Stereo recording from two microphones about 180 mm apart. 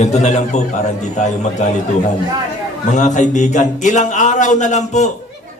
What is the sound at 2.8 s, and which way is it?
Speech, 40° left (ahead or behind).